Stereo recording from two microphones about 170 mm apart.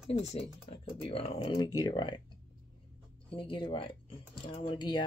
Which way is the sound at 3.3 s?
30° left (ahead or behind).